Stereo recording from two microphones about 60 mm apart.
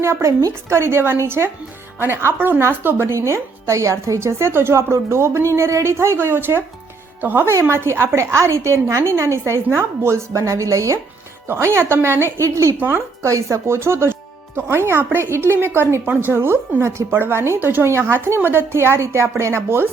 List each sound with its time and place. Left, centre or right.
0.0 s a woman's voice: right
6.1 s speech: right
7.4 s a woman's voice: right
9.5 s a woman's voice: right
10.3 s a woman's voice: right
11.4 s a woman's voice: right
12.7 s speech: right
13.2 s a woman's voice: right
13.7 s a woman's voice: right
17.8 s a woman's voice: right